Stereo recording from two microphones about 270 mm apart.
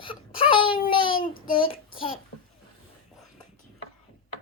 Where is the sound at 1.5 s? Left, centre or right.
Centre.